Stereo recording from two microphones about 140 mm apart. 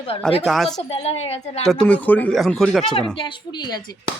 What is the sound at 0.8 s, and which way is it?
Speech, 45° left (ahead or behind).